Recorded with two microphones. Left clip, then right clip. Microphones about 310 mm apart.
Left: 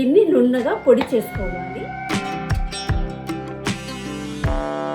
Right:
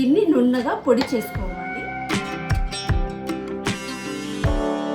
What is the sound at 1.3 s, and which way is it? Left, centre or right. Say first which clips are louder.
Speech: left 4 dB; centre.